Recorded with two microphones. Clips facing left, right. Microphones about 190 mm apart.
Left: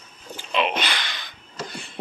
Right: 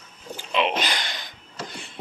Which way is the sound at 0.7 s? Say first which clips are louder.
Right 1 dB; 45° right (ahead or behind).